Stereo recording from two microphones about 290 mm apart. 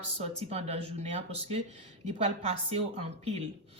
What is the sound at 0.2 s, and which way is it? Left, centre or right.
Speech, right.